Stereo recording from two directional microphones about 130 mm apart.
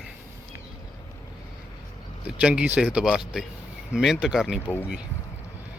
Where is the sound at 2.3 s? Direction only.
5° right (ahead or behind).